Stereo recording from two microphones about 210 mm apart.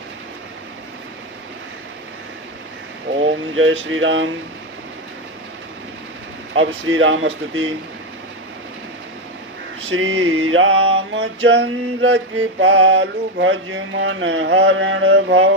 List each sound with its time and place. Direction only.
3.5 s speech: 70° right (ahead or behind)
6.5 s speech: 65° right (ahead or behind)
9.9 s mantra: 70° right (ahead or behind)